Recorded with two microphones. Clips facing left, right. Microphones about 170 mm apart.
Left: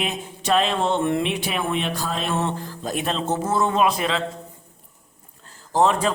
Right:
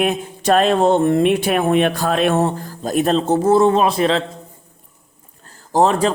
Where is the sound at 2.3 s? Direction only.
45° right (ahead or behind).